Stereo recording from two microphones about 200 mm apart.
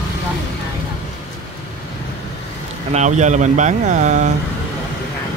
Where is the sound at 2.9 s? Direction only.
35° right (ahead or behind).